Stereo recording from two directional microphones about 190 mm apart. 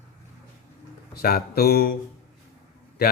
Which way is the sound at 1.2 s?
55° left (ahead or behind).